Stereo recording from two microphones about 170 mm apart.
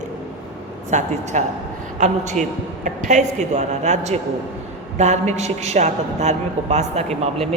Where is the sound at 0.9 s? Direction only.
45° right (ahead or behind).